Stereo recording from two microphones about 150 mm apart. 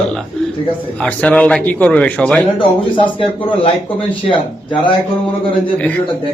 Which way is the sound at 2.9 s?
35° left (ahead or behind).